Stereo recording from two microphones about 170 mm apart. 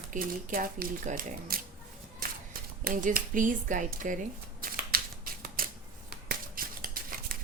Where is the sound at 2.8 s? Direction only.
50° right (ahead or behind).